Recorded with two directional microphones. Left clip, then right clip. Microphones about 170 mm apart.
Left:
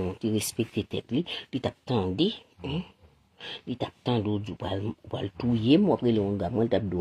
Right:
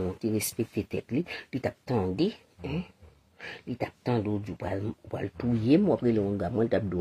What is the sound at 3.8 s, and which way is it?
Speech, 30° left (ahead or behind).